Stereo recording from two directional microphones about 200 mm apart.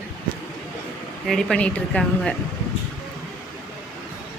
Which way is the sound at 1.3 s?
5° left (ahead or behind).